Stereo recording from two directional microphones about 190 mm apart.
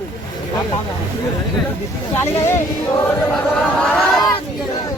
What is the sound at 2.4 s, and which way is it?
Choir, 15° left (ahead or behind).